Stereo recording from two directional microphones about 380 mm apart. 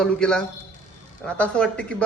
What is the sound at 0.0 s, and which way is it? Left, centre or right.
A man's voice, centre.